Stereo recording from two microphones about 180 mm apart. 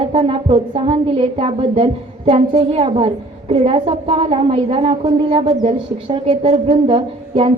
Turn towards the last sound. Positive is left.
turn(degrees=-30)  # may be behind; listen again after turning